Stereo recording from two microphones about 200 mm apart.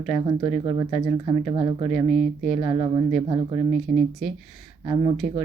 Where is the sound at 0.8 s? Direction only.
25° right (ahead or behind).